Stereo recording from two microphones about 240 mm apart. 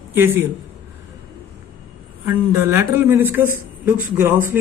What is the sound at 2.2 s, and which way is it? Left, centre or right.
Speech, centre.